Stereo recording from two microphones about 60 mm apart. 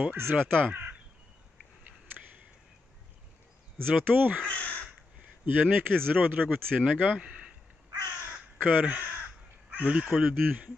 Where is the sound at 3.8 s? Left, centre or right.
Right.